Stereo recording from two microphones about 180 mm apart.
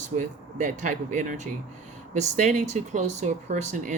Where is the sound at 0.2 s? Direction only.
45° right (ahead or behind).